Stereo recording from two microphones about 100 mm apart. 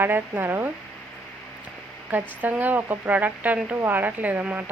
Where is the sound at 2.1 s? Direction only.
15° right (ahead or behind).